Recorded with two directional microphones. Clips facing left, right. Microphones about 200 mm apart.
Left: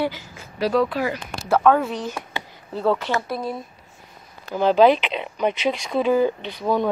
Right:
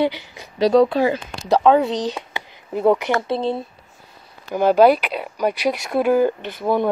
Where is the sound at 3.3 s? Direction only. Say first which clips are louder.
Right 6 dB; 25° right (ahead or behind).